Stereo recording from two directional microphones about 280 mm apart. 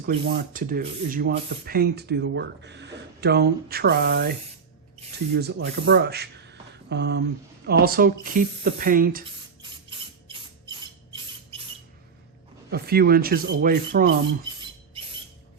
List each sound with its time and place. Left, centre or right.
0.0 s speech: right
5.3 s speech: right
10.2 s a sound: centre
12.7 s speech: right